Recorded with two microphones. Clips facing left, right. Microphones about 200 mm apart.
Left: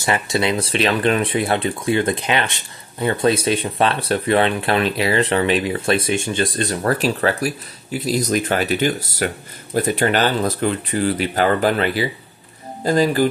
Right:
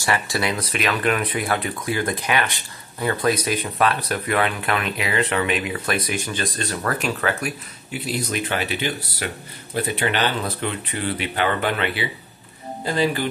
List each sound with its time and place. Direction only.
0.0 s speech: 20° left (ahead or behind); by 13.3 s 40° left (ahead or behind)